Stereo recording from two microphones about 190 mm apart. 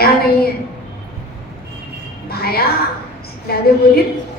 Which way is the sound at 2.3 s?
55° left (ahead or behind).